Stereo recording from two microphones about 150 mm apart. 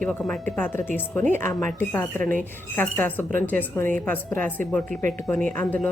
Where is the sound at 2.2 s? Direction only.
65° right (ahead or behind).